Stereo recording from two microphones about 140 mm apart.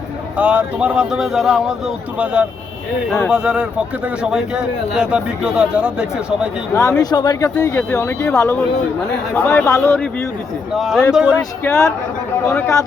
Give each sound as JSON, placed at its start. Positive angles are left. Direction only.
{"t": 0.3, "sound": "a man's voice", "side_deg": -10}
{"t": 6.7, "sound": "speech", "side_deg": 25}
{"t": 7.6, "sound": "speech", "side_deg": 15}
{"t": 9.3, "sound": "speech", "side_deg": 15}
{"t": 10.8, "sound": "speech", "side_deg": 0}
{"t": 11.6, "sound": "speech", "side_deg": 15}